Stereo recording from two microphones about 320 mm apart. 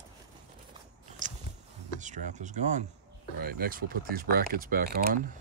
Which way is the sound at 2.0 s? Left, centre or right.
Right.